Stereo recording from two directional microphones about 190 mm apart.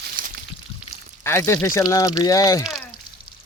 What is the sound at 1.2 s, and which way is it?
Speech, 15° left (ahead or behind).